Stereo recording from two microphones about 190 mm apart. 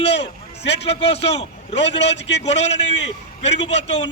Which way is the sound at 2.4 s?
35° left (ahead or behind).